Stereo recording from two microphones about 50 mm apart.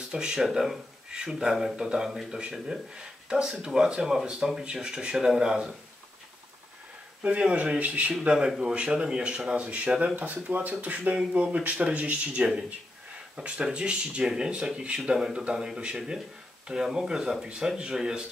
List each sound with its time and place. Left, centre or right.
0.1 s speech: centre
0.4 s speech: centre
7.2 s speech: right
8.5 s speech: centre